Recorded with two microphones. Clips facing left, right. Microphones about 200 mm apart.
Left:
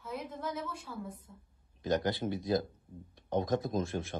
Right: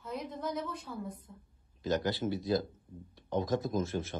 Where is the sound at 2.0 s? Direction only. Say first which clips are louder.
Even; 20° left (ahead or behind).